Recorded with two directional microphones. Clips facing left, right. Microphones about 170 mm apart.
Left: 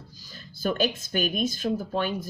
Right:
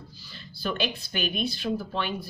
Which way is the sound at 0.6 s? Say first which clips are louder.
Left 4 dB; 45° left (ahead or behind).